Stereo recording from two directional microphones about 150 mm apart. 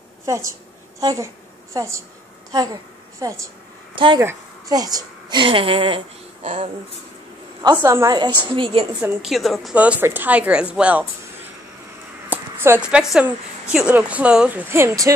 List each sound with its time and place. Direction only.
0.5 s a woman's voice: 20° right (ahead or behind)
3.9 s a woman's voice: 35° right (ahead or behind)
4.2 s a woman's voice: 20° right (ahead or behind); by 6.0 s 35° right (ahead or behind)
6.4 s speech: 50° right (ahead or behind)
7.7 s a woman's voice: 15° right (ahead or behind)
8.4 s a woman's voice: 35° right (ahead or behind)
9.2 s a woman's voice: centre (ahead or behind)
9.8 s speech: 10° right (ahead or behind)
12.3 s speech: 15° right (ahead or behind)
14.7 s speech: 15° right (ahead or behind)